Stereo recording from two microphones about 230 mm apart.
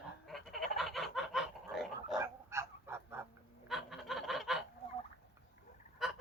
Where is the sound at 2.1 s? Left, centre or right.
Centre.